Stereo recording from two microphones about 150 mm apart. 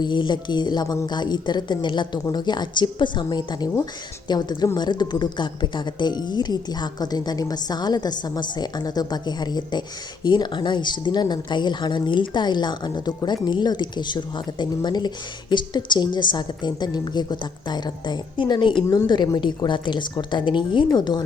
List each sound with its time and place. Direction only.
0.0 s speech: 30° left (ahead or behind)